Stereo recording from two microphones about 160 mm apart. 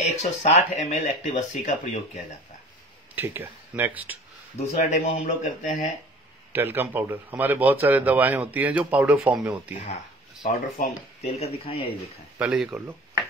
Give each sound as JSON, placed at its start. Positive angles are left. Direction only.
{"t": 0.0, "sound": "speech", "side_deg": 45}
{"t": 3.2, "sound": "a man's voice", "side_deg": -10}
{"t": 4.6, "sound": "speech", "side_deg": 45}
{"t": 6.5, "sound": "a man's voice", "side_deg": -15}
{"t": 10.5, "sound": "speech", "side_deg": 45}
{"t": 12.4, "sound": "speech", "side_deg": -5}